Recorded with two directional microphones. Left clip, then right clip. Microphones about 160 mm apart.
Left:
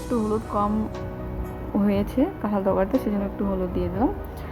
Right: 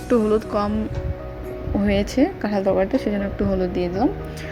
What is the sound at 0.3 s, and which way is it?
Speech, 25° right (ahead or behind).